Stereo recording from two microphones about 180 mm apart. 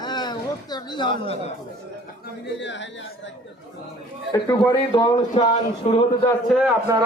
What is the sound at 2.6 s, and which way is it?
Speech, 85° left.